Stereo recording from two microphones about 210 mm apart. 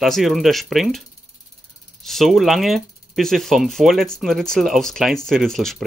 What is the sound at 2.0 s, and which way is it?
Speech, centre (ahead or behind).